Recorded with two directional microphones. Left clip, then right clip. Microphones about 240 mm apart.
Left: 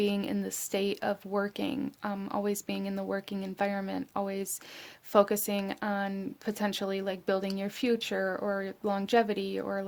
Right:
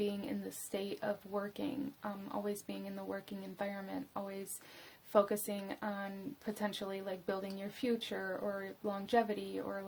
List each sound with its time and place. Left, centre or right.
0.0 s speech: left